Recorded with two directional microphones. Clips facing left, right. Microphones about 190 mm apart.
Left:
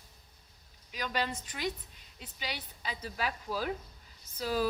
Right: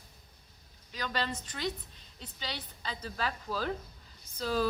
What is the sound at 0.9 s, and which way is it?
Speech, 10° left (ahead or behind).